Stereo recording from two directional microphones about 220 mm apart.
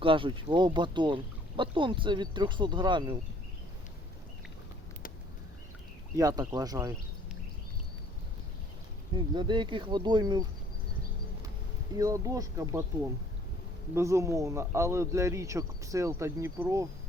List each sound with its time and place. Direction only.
0.0 s speech: 25° right (ahead or behind)
6.1 s speech: 15° right (ahead or behind)
9.1 s speech: 20° right (ahead or behind)
11.9 s speech: 15° right (ahead or behind)
13.9 s speech: 15° right (ahead or behind)